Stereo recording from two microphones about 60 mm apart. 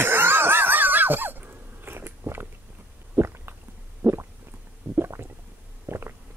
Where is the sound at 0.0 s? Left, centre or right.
Right.